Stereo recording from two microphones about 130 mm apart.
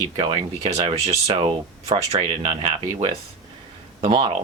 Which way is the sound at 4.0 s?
40° right (ahead or behind).